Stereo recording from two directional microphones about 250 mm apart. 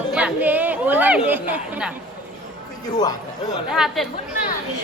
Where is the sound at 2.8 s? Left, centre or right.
Centre.